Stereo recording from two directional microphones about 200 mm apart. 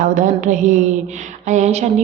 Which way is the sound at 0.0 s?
40° right (ahead or behind).